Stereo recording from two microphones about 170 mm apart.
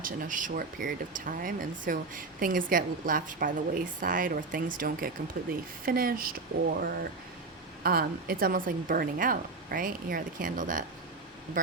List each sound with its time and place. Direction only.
0.0 s speech: 50° right (ahead or behind)